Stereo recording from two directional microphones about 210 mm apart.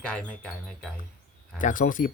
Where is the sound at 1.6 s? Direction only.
40° left (ahead or behind).